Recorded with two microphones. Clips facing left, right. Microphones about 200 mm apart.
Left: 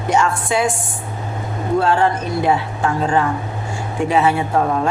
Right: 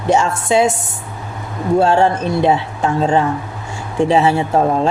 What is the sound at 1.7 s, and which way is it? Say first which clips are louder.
A woman's voice: right 3 dB; 25° right (ahead or behind).